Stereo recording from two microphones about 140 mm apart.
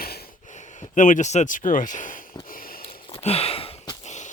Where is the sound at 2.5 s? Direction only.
90° left.